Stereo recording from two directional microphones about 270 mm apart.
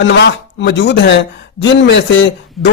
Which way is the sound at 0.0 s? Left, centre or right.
Left.